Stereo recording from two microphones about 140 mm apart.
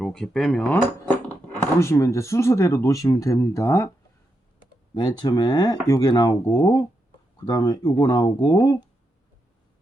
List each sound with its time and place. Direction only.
0.0 s speech: 5° left (ahead or behind); by 3.8 s 20° left (ahead or behind)
4.9 s speech: 30° left (ahead or behind)